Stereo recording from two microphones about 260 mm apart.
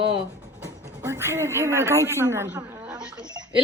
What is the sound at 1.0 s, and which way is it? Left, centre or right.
Speech, centre.